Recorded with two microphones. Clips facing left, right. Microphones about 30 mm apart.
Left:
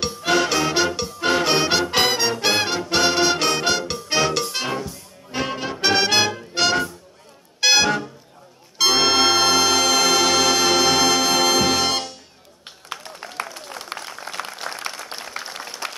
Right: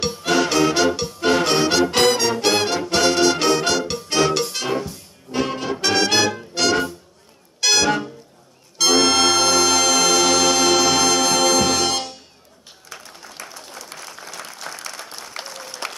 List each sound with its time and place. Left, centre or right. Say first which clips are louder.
0.2 s music: right 1 dB; centre
5.3 s music: right 3 dB; centre
8.7 s brass instrument: right 1 dB; centre
12.9 s a sound: left 7 dB; left